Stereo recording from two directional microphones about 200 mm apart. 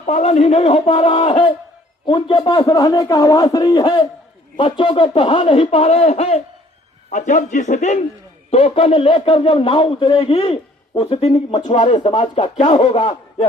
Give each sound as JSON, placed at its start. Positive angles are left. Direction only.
{"t": 0.0, "sound": "a man's voice", "side_deg": 30}